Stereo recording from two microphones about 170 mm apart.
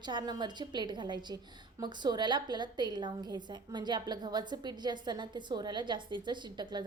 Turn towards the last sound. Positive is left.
turn(degrees=-25)  # may be behind; listen again after turning